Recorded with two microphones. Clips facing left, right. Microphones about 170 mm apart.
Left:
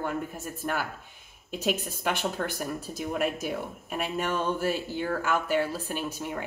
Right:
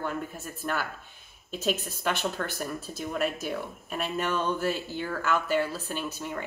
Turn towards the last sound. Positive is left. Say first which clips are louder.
# left 1 dB
turn(degrees=10)  # may be behind; listen again after turning